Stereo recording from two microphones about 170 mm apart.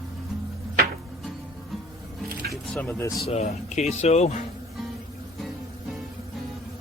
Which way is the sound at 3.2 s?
40° left (ahead or behind).